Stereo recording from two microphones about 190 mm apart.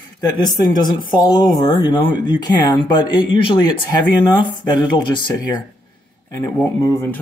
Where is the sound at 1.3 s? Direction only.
20° left (ahead or behind).